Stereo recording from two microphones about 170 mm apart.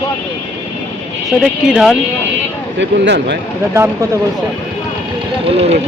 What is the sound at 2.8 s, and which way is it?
Speech, 90° right.